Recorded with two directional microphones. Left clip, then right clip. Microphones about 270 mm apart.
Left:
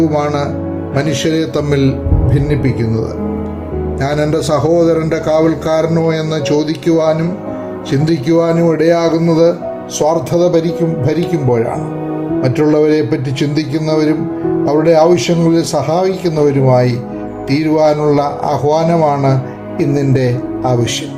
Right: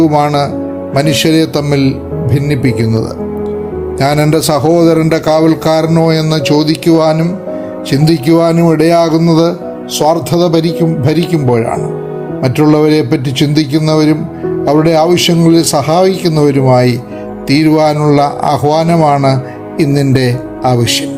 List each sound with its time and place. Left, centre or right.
0.0 s a man's voice: right
4.0 s a man's voice: right